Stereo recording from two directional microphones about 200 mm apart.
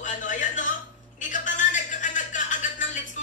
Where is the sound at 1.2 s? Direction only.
40° left (ahead or behind).